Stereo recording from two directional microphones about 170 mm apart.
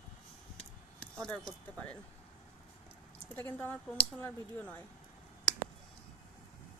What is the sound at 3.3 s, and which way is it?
Speech, 10° left (ahead or behind).